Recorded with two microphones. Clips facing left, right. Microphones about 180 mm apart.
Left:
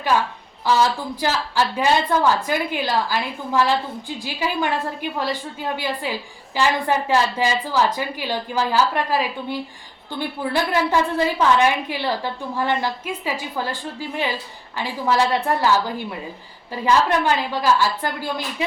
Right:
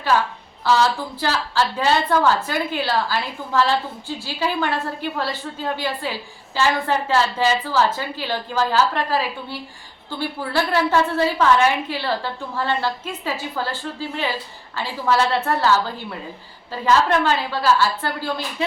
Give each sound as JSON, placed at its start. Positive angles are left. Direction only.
{"t": 0.6, "sound": "a woman's voice", "side_deg": 15}
{"t": 16.8, "sound": "a woman's voice", "side_deg": 15}